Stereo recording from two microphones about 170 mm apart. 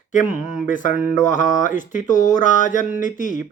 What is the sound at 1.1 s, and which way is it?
Mantra, 45° left (ahead or behind).